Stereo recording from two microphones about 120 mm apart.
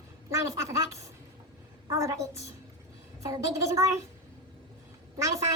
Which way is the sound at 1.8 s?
30° right (ahead or behind).